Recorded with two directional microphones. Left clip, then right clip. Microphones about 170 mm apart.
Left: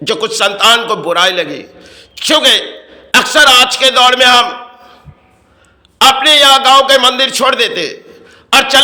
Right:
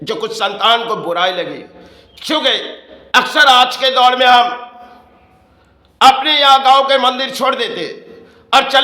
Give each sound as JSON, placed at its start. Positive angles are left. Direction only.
{"t": 0.0, "sound": "a man's voice", "side_deg": 15}
{"t": 6.0, "sound": "a man's voice", "side_deg": 15}